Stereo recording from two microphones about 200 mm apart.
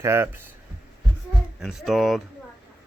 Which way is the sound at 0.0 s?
15° right (ahead or behind).